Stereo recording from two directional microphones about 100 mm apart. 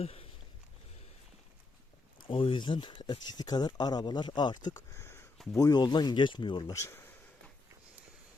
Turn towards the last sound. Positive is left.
turn(degrees=30)  # may be behind; listen again after turning